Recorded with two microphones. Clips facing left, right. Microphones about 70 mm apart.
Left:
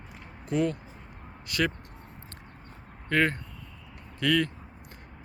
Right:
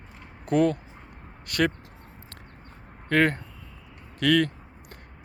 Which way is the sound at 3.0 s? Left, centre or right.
Right.